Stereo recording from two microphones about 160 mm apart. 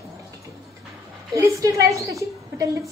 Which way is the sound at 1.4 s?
20° right (ahead or behind).